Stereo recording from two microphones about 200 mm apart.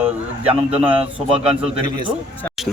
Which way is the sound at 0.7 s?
5° right (ahead or behind).